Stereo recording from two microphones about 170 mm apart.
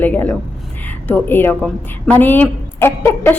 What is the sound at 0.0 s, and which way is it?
A woman's voice, 10° left (ahead or behind).